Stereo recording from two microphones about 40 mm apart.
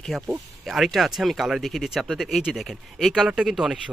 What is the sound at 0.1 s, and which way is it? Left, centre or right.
Speech, centre.